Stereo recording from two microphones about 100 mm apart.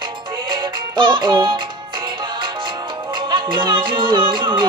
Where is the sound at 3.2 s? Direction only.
55° right (ahead or behind).